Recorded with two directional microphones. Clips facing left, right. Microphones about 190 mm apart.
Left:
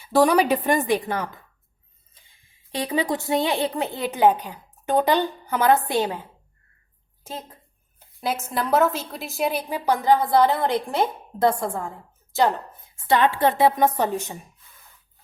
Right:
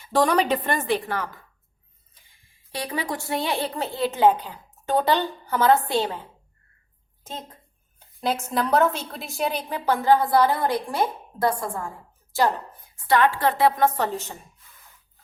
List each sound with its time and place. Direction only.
0.0 s a woman's voice: 10° left (ahead or behind)
2.7 s a woman's voice: 20° left (ahead or behind)
8.4 s a woman's voice: centre (ahead or behind)